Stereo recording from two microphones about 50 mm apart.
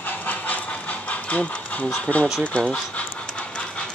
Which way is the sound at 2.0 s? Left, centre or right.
Left.